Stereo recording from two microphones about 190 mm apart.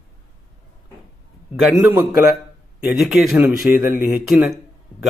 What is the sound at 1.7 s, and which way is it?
Speech, 20° right (ahead or behind).